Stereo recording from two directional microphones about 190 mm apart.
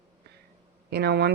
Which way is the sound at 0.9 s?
60° right (ahead or behind).